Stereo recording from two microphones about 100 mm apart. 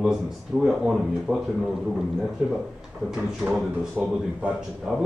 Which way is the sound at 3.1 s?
5° right (ahead or behind).